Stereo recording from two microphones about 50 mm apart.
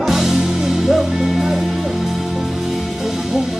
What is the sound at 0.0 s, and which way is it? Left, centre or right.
Music, centre.